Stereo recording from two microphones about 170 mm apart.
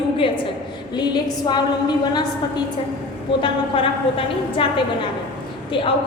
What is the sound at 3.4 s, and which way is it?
A woman's voice, 30° left (ahead or behind).